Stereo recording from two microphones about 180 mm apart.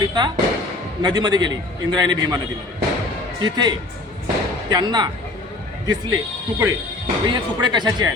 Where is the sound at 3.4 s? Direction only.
25° right (ahead or behind).